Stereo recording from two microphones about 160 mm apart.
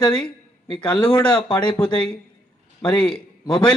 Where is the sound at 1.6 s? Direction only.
5° left (ahead or behind).